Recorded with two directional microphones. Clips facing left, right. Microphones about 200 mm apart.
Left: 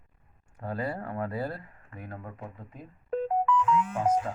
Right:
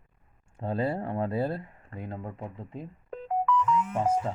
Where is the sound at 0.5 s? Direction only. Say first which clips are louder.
Right 4 dB; 25° right (ahead or behind).